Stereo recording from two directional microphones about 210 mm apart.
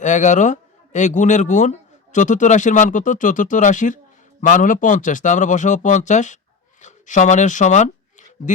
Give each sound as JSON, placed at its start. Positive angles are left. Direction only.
{"t": 0.0, "sound": "a man's voice", "side_deg": 35}